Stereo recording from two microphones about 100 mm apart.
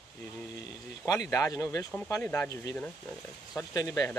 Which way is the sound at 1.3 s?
30° left (ahead or behind).